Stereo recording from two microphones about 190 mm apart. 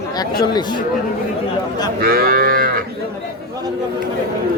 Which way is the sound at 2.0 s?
50° right (ahead or behind).